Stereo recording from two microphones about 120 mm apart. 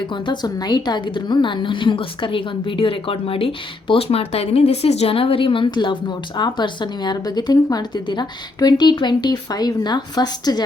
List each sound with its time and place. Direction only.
0.1 s a woman's voice: 35° left (ahead or behind)